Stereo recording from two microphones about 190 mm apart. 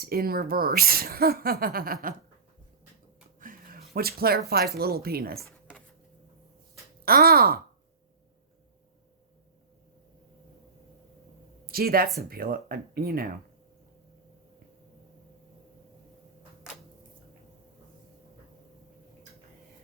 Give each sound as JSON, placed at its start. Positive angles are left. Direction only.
{"t": 0.0, "sound": "speech", "side_deg": -50}
{"t": 3.4, "sound": "a sound", "side_deg": -50}
{"t": 4.8, "sound": "speech", "side_deg": -55}
{"t": 7.0, "sound": "speech", "side_deg": -55}
{"t": 11.6, "sound": "a sound", "side_deg": -50}
{"t": 12.3, "sound": "speech", "side_deg": -50}